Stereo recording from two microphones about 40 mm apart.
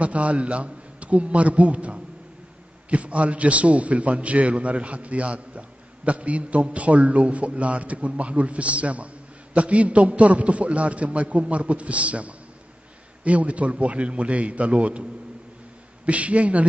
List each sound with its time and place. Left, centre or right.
0.0 s a man's voice: right
16.1 s a man's voice: right